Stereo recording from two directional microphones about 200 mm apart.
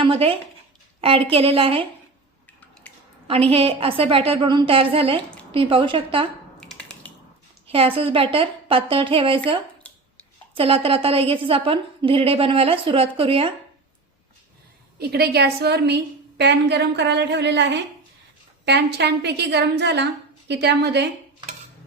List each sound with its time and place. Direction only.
0.0 s a woman's voice: 25° right (ahead or behind)
3.2 s a woman's voice: 30° right (ahead or behind)
6.6 s a sound: 5° left (ahead or behind)
7.7 s a woman's voice: 25° right (ahead or behind)
10.5 s a woman's voice: 30° right (ahead or behind)
14.9 s a woman's voice: 50° right (ahead or behind)